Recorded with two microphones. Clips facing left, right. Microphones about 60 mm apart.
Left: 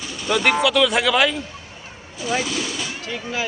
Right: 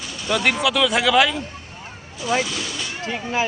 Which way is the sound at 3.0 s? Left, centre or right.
Right.